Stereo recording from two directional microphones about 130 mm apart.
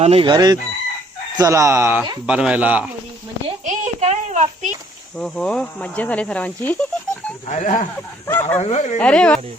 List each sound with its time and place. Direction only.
0.0 s chicken: 50° right (ahead or behind)
0.3 s chicken: 30° right (ahead or behind)
1.4 s speech: 25° right (ahead or behind)
3.7 s a sound: 65° right (ahead or behind)
5.1 s speech: 10° left (ahead or behind)
7.4 s speech: 65° left (ahead or behind)
8.3 s speech: 15° left (ahead or behind)
8.5 s speech: 60° left (ahead or behind)
9.0 s speech: 10° left (ahead or behind)